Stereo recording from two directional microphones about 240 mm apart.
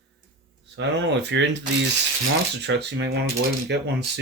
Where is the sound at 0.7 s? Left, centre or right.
Right.